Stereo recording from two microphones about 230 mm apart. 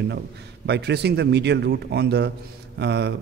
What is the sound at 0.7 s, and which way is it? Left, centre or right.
A man's voice, right.